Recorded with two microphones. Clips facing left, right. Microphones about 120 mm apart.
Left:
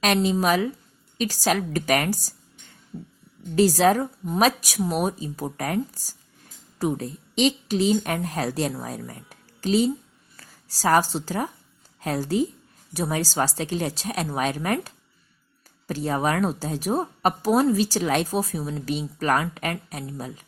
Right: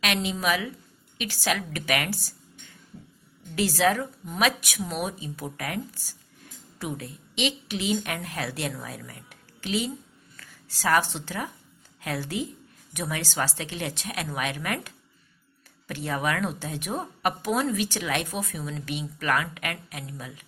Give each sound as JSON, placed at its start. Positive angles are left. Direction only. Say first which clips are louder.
{"t": 0.0, "sound": "a woman's voice", "louder": "left 6 dB", "side_deg": 40}
{"t": 3.5, "sound": "a woman's voice", "louder": "left 6 dB", "side_deg": 40}